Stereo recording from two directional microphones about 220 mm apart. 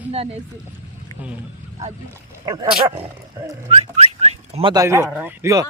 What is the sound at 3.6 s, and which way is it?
Speech, 25° right (ahead or behind).